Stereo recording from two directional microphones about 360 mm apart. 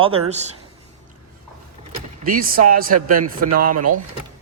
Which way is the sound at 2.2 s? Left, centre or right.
Right.